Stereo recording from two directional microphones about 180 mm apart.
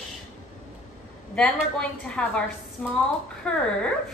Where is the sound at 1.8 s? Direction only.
5° left (ahead or behind).